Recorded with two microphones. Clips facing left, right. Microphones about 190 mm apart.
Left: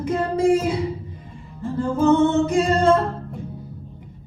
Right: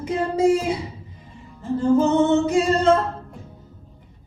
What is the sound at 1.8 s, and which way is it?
Singing, 55° left (ahead or behind).